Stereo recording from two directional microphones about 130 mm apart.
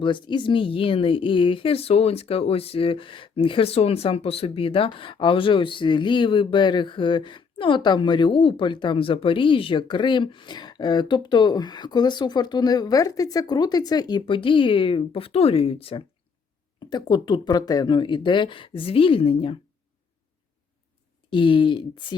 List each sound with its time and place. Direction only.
0.0 s speech: 35° left (ahead or behind)
21.2 s speech: 40° left (ahead or behind)